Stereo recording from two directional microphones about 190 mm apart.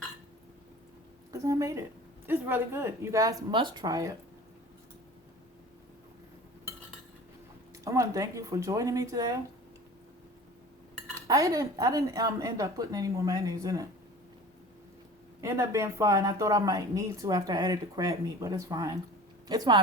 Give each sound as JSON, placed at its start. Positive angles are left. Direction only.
{"t": 1.3, "sound": "speech", "side_deg": -15}
{"t": 7.9, "sound": "speech", "side_deg": -15}
{"t": 11.3, "sound": "speech", "side_deg": -15}
{"t": 15.4, "sound": "speech", "side_deg": -15}